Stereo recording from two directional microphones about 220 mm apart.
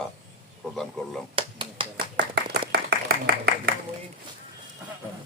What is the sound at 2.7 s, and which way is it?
Clapping, 45° right (ahead or behind).